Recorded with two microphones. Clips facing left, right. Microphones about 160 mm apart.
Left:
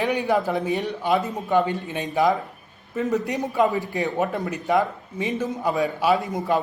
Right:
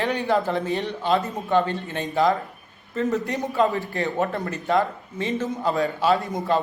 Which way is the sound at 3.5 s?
15° left (ahead or behind).